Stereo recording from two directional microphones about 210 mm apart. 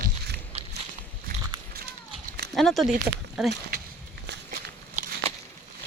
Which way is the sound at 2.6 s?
Centre (ahead or behind).